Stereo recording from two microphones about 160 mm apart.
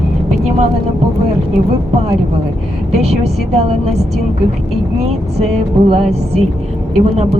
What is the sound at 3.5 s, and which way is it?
Speech, 40° right (ahead or behind).